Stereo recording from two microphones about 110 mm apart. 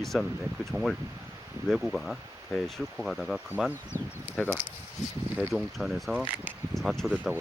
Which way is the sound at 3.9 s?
35° right (ahead or behind).